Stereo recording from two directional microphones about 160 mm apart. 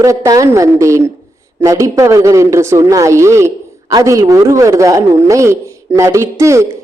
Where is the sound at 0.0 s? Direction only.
20° right (ahead or behind).